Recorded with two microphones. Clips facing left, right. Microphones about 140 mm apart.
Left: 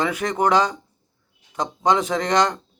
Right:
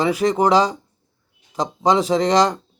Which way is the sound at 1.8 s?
35° right (ahead or behind).